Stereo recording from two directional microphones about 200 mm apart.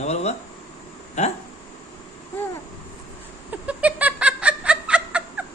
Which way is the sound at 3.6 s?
5° right (ahead or behind).